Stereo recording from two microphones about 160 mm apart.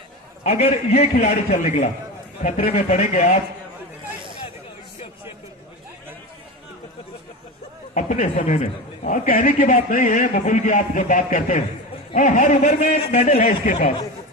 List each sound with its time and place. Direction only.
0.4 s a man's voice: 40° left (ahead or behind)
7.9 s a man's voice: 55° left (ahead or behind)
13.4 s speech: 60° left (ahead or behind)